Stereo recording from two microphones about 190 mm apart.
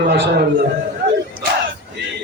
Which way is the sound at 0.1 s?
65° right (ahead or behind).